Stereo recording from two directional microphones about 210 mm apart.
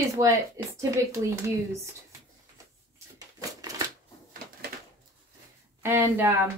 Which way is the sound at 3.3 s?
15° right (ahead or behind).